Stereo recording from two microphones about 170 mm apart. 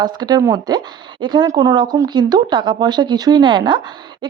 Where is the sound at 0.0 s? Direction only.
25° right (ahead or behind).